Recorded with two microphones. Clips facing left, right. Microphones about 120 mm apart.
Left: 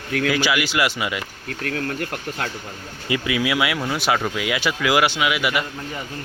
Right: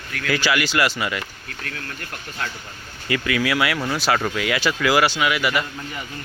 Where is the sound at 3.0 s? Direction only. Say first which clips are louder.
Even; 20° left (ahead or behind).